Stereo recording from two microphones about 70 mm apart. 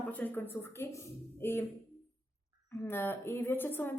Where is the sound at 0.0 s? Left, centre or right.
Left.